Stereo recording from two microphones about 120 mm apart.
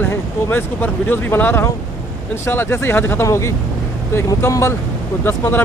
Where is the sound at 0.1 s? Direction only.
20° left (ahead or behind).